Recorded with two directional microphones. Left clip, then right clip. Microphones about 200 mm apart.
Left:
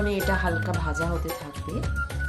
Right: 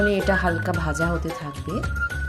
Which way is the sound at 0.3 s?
25° right (ahead or behind).